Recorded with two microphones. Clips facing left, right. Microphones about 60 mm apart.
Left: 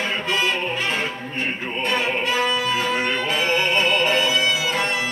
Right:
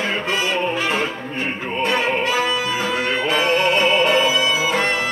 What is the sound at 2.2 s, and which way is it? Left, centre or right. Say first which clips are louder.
Music: right 1 dB; centre.